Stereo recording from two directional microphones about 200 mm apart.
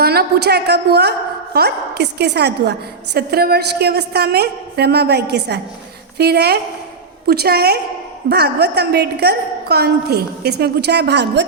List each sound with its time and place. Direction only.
0.0 s a woman's voice: 50° right (ahead or behind)